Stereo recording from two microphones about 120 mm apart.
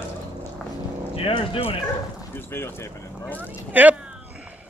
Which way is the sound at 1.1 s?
50° left (ahead or behind).